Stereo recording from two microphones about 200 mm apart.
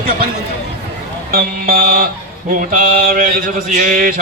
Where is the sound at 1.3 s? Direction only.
50° right (ahead or behind).